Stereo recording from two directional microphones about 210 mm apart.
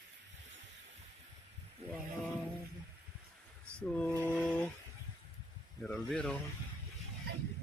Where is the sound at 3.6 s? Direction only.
5° left (ahead or behind).